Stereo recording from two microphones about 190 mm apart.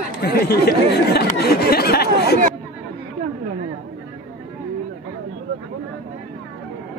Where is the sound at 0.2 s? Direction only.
55° left (ahead or behind).